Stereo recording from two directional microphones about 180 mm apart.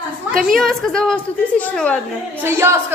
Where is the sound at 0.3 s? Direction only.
50° right (ahead or behind).